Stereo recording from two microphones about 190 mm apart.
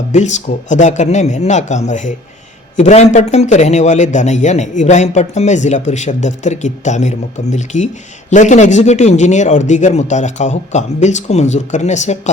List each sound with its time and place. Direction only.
0.1 s a man's voice: 40° left (ahead or behind)